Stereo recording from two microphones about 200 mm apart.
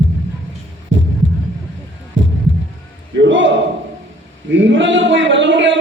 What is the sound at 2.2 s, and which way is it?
Heart sounds, 70° right (ahead or behind).